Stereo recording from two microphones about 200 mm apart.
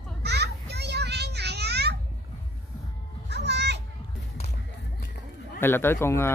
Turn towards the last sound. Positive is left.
turn(degrees=10)  # may be behind; listen again after turning